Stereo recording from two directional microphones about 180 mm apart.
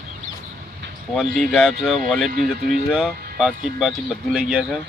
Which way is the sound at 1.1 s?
Centre (ahead or behind).